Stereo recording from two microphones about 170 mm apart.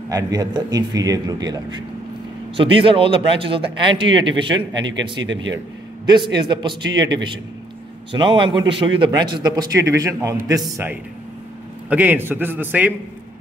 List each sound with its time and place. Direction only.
0.1 s a man's voice: 25° right (ahead or behind)
5.2 s speech: 90° right
6.0 s a man's voice: 25° right (ahead or behind)
8.1 s a man's voice: 30° right (ahead or behind); by 12.9 s 10° right (ahead or behind)